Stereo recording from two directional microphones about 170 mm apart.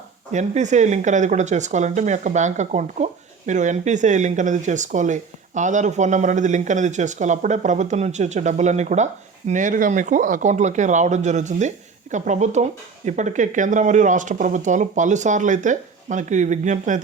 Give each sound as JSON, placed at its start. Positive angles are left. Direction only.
{"t": 0.3, "sound": "speech", "side_deg": -45}